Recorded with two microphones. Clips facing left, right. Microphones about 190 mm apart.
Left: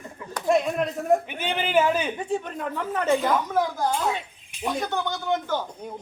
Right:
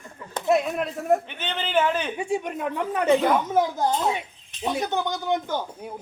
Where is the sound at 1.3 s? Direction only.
10° left (ahead or behind).